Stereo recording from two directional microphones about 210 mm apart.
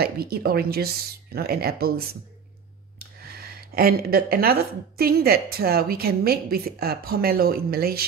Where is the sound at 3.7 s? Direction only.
45° right (ahead or behind).